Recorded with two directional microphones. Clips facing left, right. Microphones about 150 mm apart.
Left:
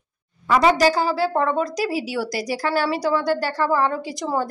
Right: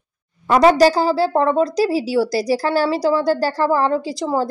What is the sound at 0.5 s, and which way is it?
A woman's voice, 40° right (ahead or behind).